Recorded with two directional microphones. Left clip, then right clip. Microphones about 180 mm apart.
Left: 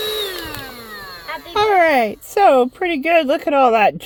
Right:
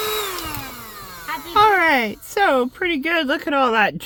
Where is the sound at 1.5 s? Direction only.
Centre (ahead or behind).